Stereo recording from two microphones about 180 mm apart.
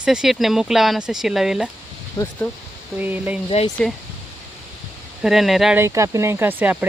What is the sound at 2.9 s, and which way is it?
Speech, 10° right (ahead or behind).